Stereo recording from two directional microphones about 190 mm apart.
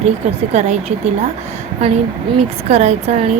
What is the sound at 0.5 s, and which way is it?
Speech, 35° right (ahead or behind).